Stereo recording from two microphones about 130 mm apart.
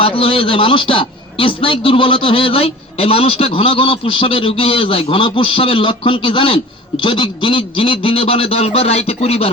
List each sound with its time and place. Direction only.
0.0 s a man's voice: 45° left (ahead or behind)